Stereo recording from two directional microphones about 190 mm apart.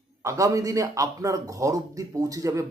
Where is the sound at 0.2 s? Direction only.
15° right (ahead or behind).